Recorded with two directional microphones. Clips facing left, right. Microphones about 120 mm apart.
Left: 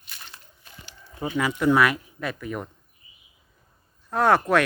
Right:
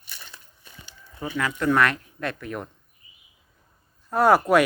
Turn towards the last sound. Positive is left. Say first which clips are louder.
# right 2 dB
turn(degrees=-10)  # may be behind; listen again after turning